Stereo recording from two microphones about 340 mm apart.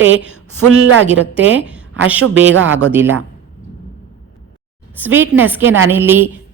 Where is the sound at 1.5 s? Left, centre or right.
Centre.